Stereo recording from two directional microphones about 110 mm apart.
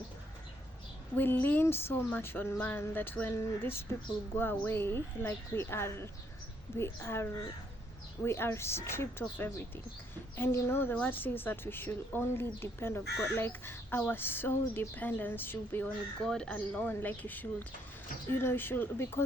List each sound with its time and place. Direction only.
1.1 s a woman's voice: 20° left (ahead or behind)
16.2 s a woman's voice: 5° left (ahead or behind)